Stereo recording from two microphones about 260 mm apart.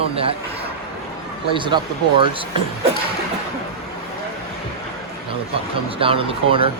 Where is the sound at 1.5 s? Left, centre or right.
Centre.